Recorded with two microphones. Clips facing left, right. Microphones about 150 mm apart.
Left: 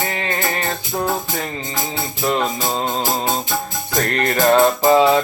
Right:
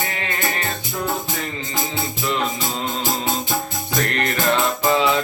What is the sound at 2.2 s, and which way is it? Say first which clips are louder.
Music: left 5 dB; 40° left (ahead or behind).